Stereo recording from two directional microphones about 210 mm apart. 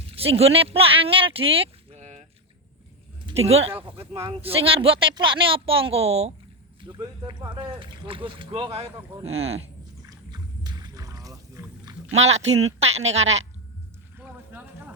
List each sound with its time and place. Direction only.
0.2 s speech: 30° right (ahead or behind)
3.2 s a woman's voice: 30° right (ahead or behind)
10.1 s rowboat: 20° right (ahead or behind)
12.1 s speech: 30° right (ahead or behind)
14.2 s a sound: 5° right (ahead or behind)